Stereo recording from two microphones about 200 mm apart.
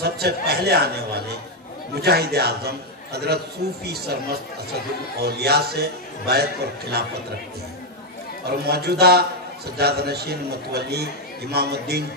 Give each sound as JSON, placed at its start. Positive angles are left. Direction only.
{"t": 0.0, "sound": "a man's voice", "side_deg": -55}
{"t": 5.2, "sound": "a man's voice", "side_deg": -55}
{"t": 8.5, "sound": "a man's voice", "side_deg": -55}